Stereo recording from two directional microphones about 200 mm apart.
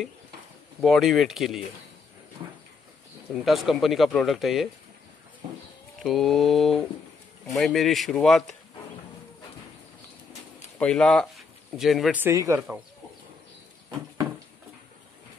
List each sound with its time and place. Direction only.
0.7 s speech: centre (ahead or behind)
3.4 s speech: centre (ahead or behind)
5.4 s speech: 35° right (ahead or behind)
6.0 s speech: centre (ahead or behind)
10.8 s speech: 5° left (ahead or behind); by 12.6 s 15° right (ahead or behind)